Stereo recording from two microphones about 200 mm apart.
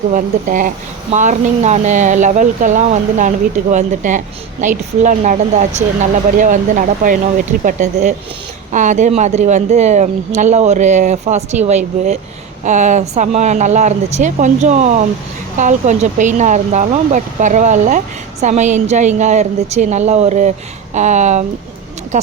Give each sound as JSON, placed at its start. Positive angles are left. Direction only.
{"t": 0.1, "sound": "speech", "side_deg": -40}